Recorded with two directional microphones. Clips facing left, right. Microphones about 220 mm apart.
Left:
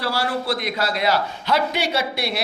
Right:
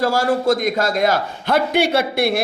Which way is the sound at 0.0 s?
45° right (ahead or behind).